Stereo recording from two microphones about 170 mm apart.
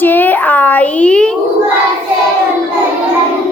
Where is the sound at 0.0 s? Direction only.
10° left (ahead or behind).